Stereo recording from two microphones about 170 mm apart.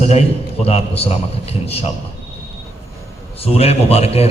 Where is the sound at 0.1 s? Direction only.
40° left (ahead or behind).